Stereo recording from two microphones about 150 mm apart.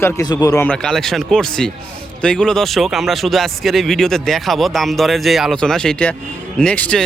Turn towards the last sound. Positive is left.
turn(degrees=10)  # may be behind; listen again after turning